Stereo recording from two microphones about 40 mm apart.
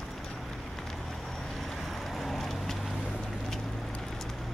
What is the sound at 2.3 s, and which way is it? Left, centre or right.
Vehicle, centre.